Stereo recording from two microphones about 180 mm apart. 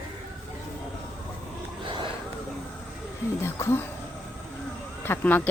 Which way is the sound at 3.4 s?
15° left (ahead or behind).